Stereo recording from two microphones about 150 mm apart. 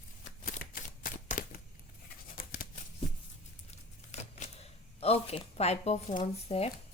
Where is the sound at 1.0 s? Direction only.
65° left (ahead or behind).